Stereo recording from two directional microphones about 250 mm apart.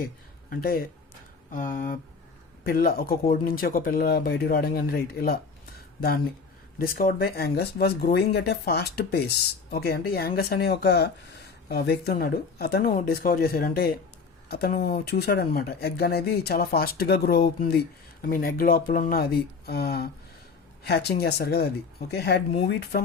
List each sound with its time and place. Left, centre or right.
0.5 s speech: left
6.7 s speech: left